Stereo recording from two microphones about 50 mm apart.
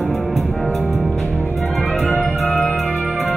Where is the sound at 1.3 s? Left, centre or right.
Left.